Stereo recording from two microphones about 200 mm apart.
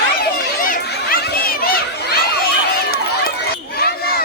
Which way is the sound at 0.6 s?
45° left (ahead or behind).